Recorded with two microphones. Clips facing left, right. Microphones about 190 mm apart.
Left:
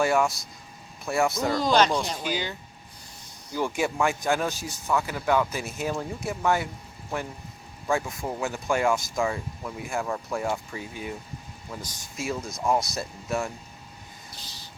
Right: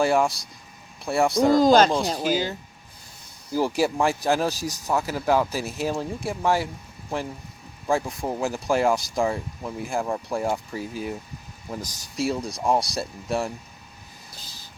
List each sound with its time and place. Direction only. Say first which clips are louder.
0.0 s speech: right 2 dB; 30° right (ahead or behind)
1.5 s speech: right 7 dB; 45° right (ahead or behind)
1.9 s speech: right 5 dB; 35° right (ahead or behind)
3.6 s speech: right 3 dB; 35° right (ahead or behind)
7.9 s speech: right 3 dB; 35° right (ahead or behind)